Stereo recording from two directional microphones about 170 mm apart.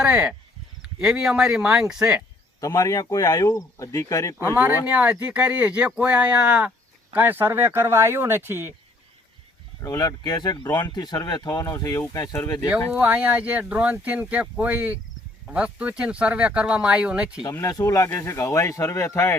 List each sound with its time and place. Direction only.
0.0 s speech: 5° right (ahead or behind)
2.6 s speech: 20° left (ahead or behind)
4.9 s speech: 10° right (ahead or behind)
9.8 s speech: 20° left (ahead or behind)
12.9 s speech: 10° right (ahead or behind)
17.5 s speech: 20° left (ahead or behind)